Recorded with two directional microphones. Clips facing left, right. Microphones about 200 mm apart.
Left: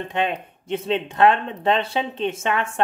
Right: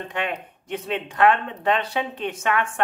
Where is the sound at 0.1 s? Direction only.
25° left (ahead or behind).